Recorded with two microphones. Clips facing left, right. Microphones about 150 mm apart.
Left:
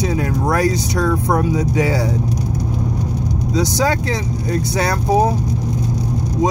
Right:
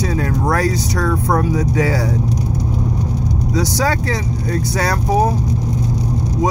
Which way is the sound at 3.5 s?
20° left (ahead or behind).